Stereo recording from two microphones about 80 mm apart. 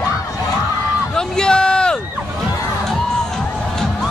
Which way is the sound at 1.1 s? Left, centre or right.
Centre.